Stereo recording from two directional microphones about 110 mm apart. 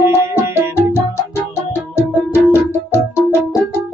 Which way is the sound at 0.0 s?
20° right (ahead or behind).